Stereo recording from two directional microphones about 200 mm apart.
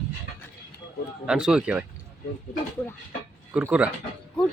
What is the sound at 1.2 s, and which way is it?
Speech, 5° right (ahead or behind).